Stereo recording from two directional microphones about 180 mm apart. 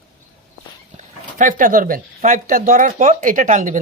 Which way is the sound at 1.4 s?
45° right (ahead or behind).